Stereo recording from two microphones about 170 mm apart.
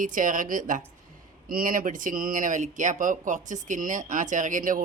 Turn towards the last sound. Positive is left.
turn(degrees=-50)  # may be behind; listen again after turning